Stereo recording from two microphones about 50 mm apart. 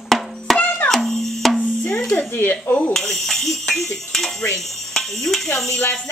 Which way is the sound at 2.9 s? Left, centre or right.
Centre.